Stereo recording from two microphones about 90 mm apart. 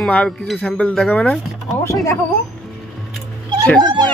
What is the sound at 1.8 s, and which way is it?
Speech, 35° left (ahead or behind).